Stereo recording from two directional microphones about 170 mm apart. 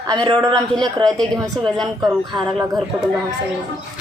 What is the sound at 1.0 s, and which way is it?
A man's voice, centre (ahead or behind).